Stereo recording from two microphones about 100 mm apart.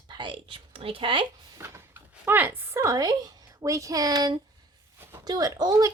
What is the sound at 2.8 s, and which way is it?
A woman's voice, 35° right (ahead or behind).